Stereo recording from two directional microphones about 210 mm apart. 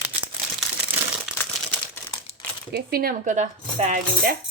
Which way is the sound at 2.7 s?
45° right (ahead or behind).